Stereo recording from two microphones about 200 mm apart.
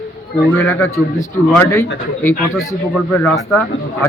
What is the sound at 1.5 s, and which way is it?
Speech, 10° left (ahead or behind).